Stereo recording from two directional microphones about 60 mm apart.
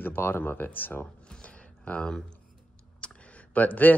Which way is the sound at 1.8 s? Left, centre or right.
Centre.